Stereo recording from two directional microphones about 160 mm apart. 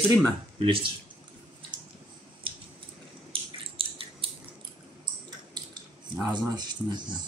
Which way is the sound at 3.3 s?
35° right (ahead or behind).